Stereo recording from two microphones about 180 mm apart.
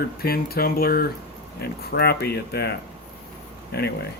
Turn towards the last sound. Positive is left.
turn(degrees=65)  # may be behind; listen again after turning